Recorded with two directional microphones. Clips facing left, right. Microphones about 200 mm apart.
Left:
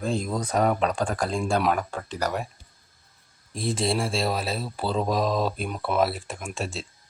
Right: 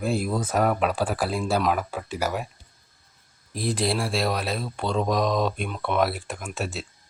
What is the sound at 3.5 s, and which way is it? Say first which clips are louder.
Speech: even; centre (ahead or behind).